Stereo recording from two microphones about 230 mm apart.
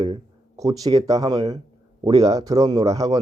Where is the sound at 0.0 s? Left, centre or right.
Centre.